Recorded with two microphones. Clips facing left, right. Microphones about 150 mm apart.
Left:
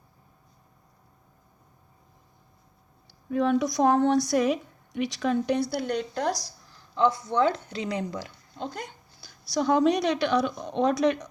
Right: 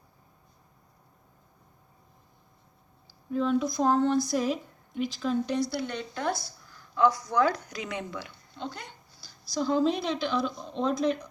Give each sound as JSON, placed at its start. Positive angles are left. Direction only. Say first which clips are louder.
{"t": 3.2, "sound": "a woman's voice", "louder": "left 3 dB", "side_deg": 70}
{"t": 9.4, "sound": "a woman's voice", "louder": "left 3 dB", "side_deg": 70}